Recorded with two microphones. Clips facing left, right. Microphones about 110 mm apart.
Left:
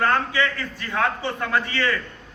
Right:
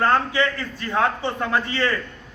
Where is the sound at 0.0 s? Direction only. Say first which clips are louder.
Right 2 dB; 25° right (ahead or behind).